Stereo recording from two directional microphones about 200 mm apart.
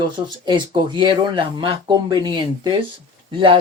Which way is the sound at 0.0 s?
25° right (ahead or behind).